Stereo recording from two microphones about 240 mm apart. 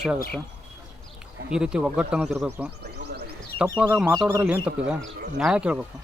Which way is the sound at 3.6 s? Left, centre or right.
Centre.